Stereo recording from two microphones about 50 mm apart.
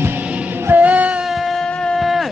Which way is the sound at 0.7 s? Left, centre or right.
Right.